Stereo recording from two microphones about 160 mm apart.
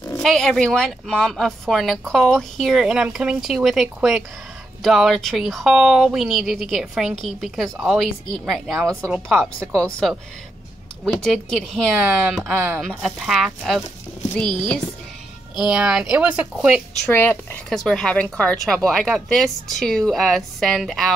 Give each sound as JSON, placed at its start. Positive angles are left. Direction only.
{"t": 0.2, "sound": "speech", "side_deg": 0}
{"t": 9.3, "sound": "a woman's voice", "side_deg": -15}
{"t": 9.7, "sound": "speech", "side_deg": 5}
{"t": 15.6, "sound": "speech", "side_deg": -5}
{"t": 17.0, "sound": "speech", "side_deg": 10}